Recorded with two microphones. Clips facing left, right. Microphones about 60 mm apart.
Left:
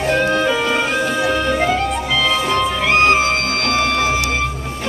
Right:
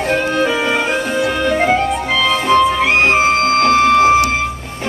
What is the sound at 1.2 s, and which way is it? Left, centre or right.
Music, right.